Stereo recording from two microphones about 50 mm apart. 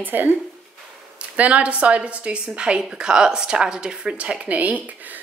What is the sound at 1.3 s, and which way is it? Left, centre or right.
A woman's voice, right.